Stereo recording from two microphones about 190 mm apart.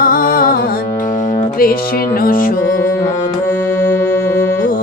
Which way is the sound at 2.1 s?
50° left (ahead or behind).